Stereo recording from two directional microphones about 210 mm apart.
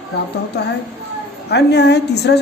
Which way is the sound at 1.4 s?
55° left (ahead or behind).